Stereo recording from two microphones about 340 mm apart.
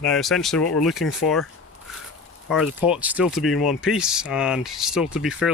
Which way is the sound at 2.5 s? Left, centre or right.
Centre.